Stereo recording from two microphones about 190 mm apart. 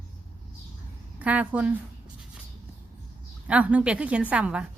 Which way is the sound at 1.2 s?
10° right (ahead or behind).